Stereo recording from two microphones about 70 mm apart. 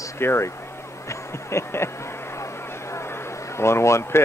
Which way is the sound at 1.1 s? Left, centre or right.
Left.